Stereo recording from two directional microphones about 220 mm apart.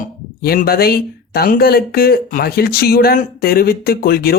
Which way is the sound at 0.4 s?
45° left (ahead or behind).